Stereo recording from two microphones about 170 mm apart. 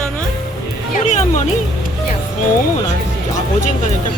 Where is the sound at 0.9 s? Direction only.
45° left (ahead or behind).